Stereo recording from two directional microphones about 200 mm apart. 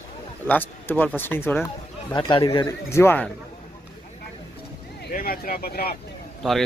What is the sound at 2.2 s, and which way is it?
Speech, 25° left (ahead or behind).